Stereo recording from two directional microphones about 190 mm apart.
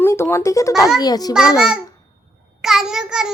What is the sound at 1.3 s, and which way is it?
Speech, 5° right (ahead or behind).